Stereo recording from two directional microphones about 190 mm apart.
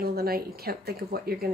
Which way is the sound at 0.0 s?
55° right (ahead or behind).